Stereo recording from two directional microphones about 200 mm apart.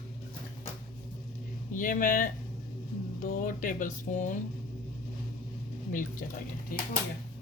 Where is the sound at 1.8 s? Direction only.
40° left (ahead or behind).